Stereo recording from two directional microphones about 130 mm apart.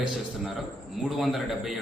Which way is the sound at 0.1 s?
Centre (ahead or behind).